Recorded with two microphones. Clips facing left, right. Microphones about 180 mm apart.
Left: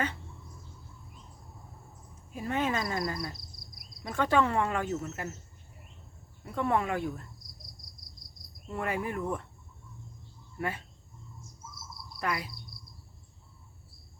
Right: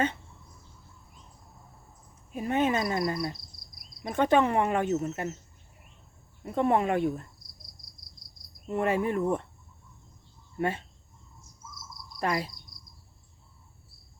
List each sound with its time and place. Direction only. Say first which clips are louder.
2.3 s speech: right 4 dB; 20° right (ahead or behind)
6.4 s speech: right 4 dB; 20° right (ahead or behind)
8.7 s speech: right 6 dB; 25° right (ahead or behind)
10.6 s speech: right 5 dB; 25° right (ahead or behind)
12.2 s speech: right 4 dB; 30° right (ahead or behind)